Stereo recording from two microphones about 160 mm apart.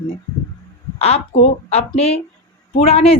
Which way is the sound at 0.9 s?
40° left (ahead or behind).